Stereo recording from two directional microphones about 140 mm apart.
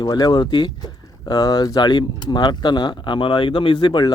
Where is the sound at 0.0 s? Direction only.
30° left (ahead or behind).